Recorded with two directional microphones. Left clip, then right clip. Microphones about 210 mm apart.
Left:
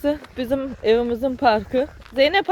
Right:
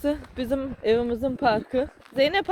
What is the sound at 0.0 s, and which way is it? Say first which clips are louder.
Speech: left 4 dB; centre (ahead or behind).